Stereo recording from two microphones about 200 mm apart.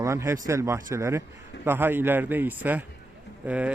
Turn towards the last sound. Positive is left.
turn(degrees=-5)  # may be behind; listen again after turning